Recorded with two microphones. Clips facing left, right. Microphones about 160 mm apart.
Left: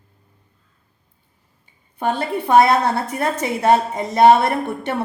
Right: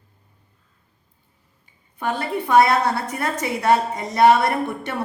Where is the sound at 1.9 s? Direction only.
30° left (ahead or behind).